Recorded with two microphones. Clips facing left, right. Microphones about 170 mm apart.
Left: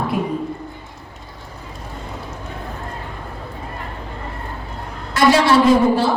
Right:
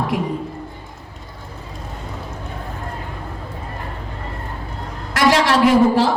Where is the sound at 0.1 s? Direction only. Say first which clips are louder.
Left 1 dB; 90° right.